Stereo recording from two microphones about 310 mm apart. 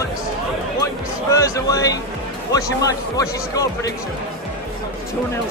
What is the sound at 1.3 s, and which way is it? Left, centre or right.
Speech, centre.